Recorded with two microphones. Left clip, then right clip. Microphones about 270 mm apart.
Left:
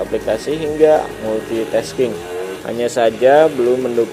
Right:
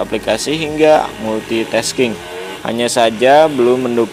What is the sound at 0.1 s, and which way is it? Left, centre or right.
A man's voice, right.